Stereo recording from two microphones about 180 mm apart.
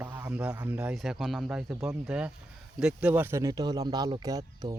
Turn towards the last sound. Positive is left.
turn(degrees=-20)  # may be behind; listen again after turning